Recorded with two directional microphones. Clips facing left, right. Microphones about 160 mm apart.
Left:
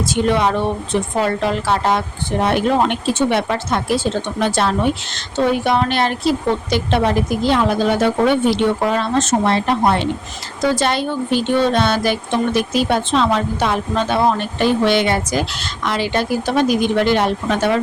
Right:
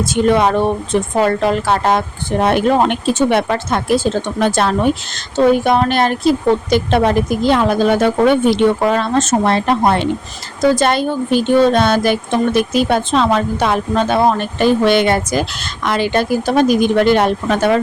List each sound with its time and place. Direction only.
0.0 s a woman's voice: 50° right (ahead or behind)